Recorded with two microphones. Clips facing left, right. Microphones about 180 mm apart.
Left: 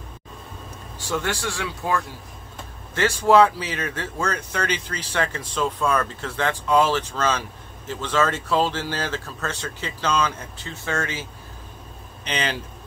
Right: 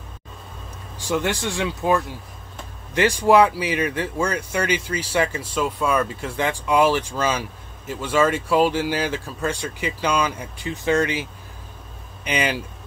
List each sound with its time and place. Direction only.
0.9 s speech: 15° right (ahead or behind)
12.3 s speech: 10° right (ahead or behind)